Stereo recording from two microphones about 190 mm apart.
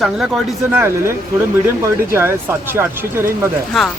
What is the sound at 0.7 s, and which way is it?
Speech, 15° right (ahead or behind).